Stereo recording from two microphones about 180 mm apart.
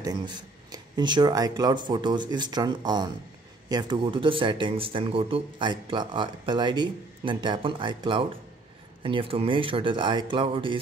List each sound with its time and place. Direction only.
0.0 s speech: 25° right (ahead or behind)